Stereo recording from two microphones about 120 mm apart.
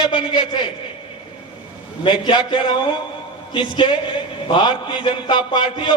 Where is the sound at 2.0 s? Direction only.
40° left (ahead or behind).